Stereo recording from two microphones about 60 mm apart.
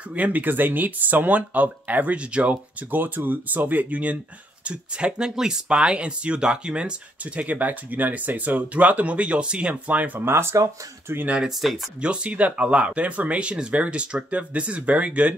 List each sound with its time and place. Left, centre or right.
0.1 s speech: right
10.2 s speech: right
11.4 s speech: centre
12.0 s speech: centre